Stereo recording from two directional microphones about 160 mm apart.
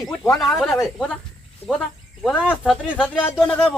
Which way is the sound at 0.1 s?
Centre (ahead or behind).